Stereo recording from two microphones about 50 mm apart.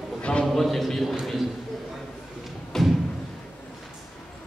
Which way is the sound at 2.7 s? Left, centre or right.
Centre.